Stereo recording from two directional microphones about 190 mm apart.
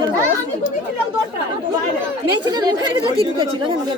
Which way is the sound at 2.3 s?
20° right (ahead or behind).